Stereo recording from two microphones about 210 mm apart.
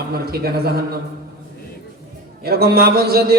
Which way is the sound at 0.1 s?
45° right (ahead or behind).